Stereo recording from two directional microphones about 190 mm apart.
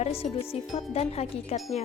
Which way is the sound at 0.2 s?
35° left (ahead or behind).